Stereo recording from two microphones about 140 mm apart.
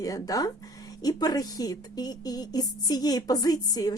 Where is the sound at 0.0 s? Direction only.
25° left (ahead or behind).